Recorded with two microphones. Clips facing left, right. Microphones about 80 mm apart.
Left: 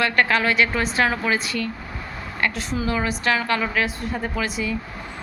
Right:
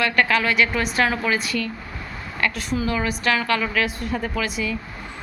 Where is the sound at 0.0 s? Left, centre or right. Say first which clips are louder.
Even; left.